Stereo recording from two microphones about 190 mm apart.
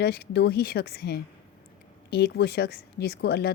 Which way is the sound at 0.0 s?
60° left (ahead or behind).